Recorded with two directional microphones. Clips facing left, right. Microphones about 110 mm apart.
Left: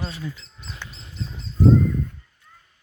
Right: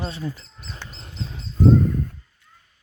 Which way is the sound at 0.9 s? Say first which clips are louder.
Right 2 dB; 50° right (ahead or behind).